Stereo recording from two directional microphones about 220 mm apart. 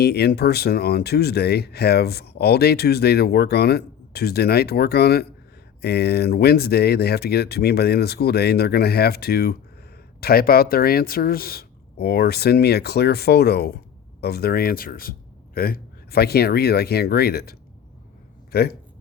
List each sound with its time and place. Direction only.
0.0 s speech: 45° left (ahead or behind)